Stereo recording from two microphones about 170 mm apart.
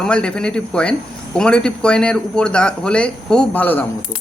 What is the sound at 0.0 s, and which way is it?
Speech, 5° left (ahead or behind).